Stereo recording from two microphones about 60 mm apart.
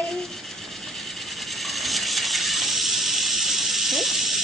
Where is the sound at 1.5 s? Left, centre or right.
Centre.